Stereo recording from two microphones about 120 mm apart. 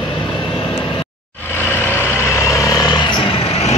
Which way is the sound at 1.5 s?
15° left (ahead or behind).